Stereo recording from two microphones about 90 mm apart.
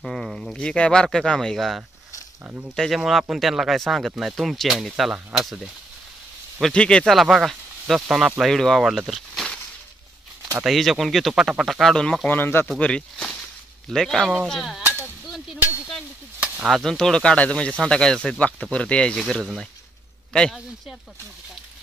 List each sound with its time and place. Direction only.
0.0 s speech: centre (ahead or behind)
2.4 s speech: 20° right (ahead or behind)
2.7 s speech: 5° left (ahead or behind)
6.6 s speech: 10° left (ahead or behind)
7.2 s speech: centre (ahead or behind)
10.6 s speech: centre (ahead or behind)
12.3 s speech: 20° left (ahead or behind)
12.7 s speech: 10° left (ahead or behind)
16.3 s chop: 10° right (ahead or behind)
16.8 s speech: 5° left (ahead or behind)